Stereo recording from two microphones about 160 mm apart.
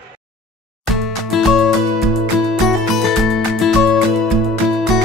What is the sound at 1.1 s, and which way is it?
Music, centre (ahead or behind).